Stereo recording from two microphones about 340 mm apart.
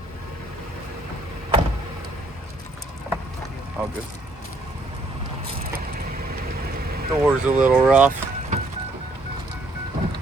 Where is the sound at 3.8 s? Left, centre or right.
Centre.